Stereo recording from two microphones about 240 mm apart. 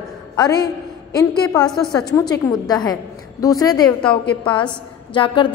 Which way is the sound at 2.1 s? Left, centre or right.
Centre.